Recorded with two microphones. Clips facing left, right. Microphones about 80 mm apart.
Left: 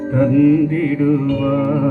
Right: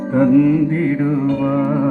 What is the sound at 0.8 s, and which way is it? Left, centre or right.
Music, right.